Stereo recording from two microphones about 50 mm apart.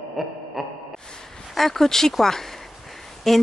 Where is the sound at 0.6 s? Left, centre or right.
Centre.